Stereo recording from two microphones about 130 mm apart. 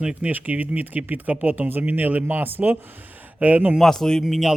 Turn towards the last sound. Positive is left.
turn(degrees=0)  # may be behind; listen again after turning